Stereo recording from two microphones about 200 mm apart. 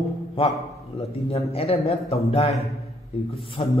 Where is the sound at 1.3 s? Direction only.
30° left (ahead or behind).